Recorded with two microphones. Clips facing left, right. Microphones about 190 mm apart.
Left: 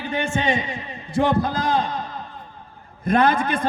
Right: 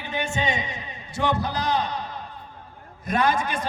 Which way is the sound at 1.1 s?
50° left (ahead or behind).